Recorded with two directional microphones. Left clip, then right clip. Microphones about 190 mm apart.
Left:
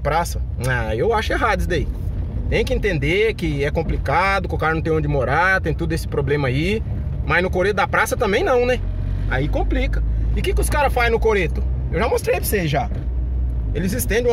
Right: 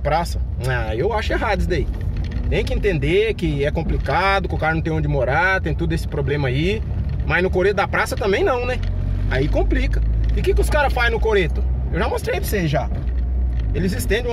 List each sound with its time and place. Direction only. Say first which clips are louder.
0.0 s speech: even; 30° left (ahead or behind)
9.3 s speech: right 2 dB; 20° left (ahead or behind)
10.4 s speech: right 1 dB; 30° left (ahead or behind)